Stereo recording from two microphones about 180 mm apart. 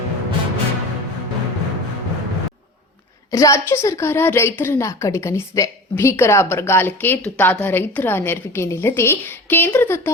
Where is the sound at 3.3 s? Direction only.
15° left (ahead or behind).